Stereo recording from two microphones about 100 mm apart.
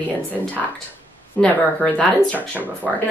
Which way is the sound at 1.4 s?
10° left (ahead or behind).